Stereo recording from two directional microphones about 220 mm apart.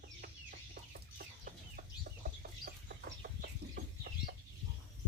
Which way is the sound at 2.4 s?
40° right (ahead or behind).